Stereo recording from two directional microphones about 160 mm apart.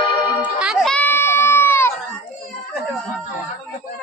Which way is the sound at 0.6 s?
Centre (ahead or behind).